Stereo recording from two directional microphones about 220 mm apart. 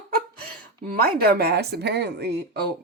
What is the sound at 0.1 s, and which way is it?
Speech, 45° right (ahead or behind).